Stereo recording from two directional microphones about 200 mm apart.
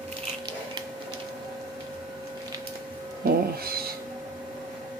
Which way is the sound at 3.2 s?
50° right (ahead or behind).